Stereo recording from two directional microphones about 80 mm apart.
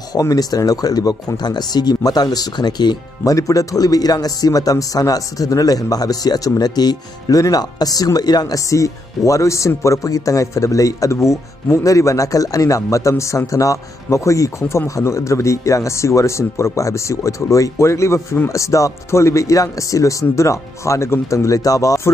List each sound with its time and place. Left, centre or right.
0.1 s speech: left
3.3 s speech: left